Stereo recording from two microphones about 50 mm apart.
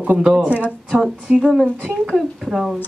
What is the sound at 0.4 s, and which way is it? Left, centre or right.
Speech, right.